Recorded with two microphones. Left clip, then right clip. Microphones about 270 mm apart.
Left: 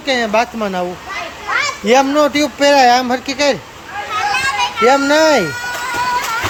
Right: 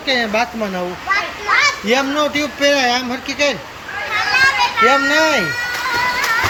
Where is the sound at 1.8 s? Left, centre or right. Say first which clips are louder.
Left 5 dB; centre.